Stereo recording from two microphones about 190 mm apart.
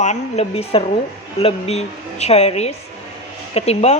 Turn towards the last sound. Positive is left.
turn(degrees=30)  # may be behind; listen again after turning